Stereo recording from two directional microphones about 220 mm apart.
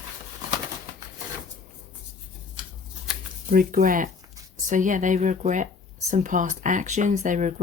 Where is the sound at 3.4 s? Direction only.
40° right (ahead or behind).